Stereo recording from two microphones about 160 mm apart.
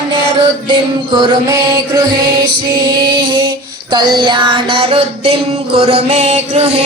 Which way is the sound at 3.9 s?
25° right (ahead or behind).